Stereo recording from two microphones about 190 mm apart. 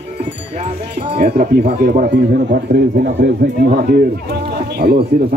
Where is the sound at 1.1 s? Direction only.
50° right (ahead or behind).